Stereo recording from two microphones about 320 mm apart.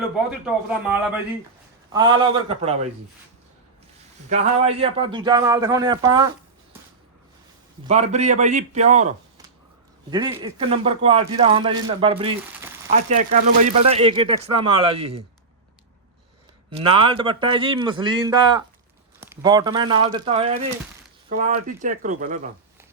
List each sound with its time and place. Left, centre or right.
0.4 s a man's voice: centre
4.3 s a man's voice: centre
7.9 s a man's voice: right
16.7 s a man's voice: centre